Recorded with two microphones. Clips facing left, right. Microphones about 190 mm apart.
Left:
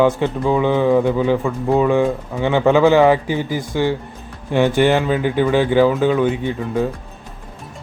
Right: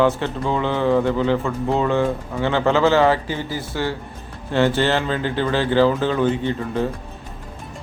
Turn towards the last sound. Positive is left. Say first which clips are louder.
# left 2 dB
turn(degrees=10)  # may be behind; listen again after turning